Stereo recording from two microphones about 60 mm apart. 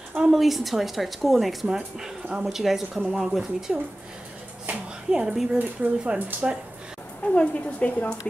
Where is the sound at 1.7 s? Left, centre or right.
Centre.